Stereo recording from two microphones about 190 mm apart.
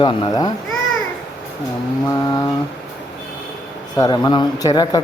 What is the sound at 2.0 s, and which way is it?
Speech, 20° left (ahead or behind).